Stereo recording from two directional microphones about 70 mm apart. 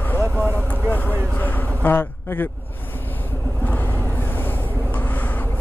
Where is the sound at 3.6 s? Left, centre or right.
Left.